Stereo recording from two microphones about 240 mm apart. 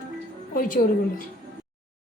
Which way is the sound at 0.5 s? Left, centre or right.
Left.